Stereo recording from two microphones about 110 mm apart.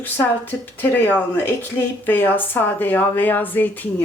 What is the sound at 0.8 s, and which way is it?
Speech, 20° left (ahead or behind).